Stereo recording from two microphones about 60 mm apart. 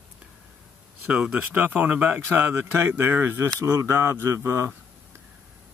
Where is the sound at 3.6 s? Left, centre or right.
Right.